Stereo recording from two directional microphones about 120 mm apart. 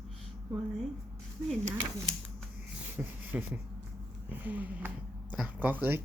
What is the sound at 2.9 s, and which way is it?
Speech, 15° right (ahead or behind).